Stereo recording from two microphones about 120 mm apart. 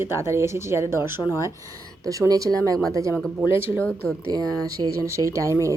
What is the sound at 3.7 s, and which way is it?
Speech, 15° left (ahead or behind).